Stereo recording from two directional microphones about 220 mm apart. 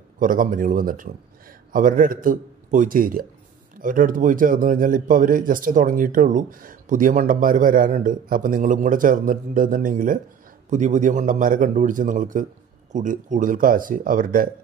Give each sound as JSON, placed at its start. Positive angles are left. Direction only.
{"t": 0.2, "sound": "speech", "side_deg": -40}